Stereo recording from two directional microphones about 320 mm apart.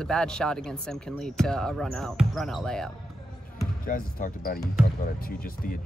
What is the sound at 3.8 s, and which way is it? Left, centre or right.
Speech, left.